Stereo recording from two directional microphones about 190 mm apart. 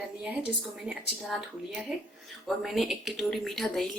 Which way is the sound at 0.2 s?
5° right (ahead or behind).